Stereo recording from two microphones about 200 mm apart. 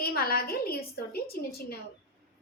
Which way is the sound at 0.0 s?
50° left (ahead or behind).